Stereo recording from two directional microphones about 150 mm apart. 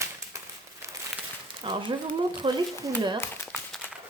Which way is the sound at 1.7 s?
30° right (ahead or behind).